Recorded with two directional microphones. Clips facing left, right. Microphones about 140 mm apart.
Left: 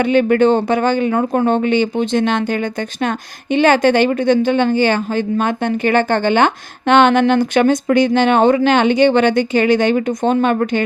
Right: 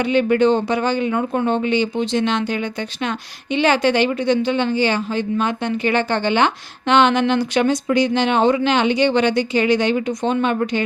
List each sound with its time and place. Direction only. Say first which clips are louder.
0.0 s speech: left 3 dB; 50° left (ahead or behind)